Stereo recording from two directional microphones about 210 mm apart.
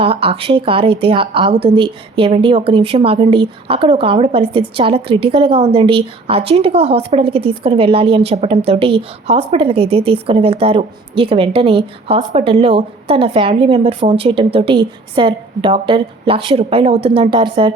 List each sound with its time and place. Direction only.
0.0 s a woman's voice: 25° right (ahead or behind)